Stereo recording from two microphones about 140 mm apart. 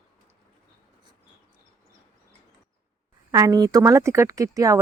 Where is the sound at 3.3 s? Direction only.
25° right (ahead or behind).